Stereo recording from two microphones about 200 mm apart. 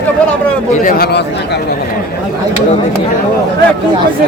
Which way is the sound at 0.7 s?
45° left (ahead or behind).